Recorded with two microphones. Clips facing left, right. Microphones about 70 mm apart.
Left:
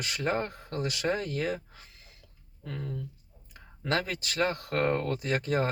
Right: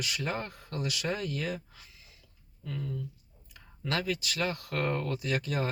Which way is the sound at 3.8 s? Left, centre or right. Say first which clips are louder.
Left 2 dB; left.